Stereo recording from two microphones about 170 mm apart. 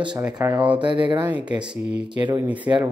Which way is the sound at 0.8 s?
30° right (ahead or behind).